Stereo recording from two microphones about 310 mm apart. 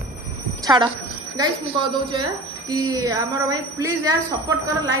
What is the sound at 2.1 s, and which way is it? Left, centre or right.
Speech, centre.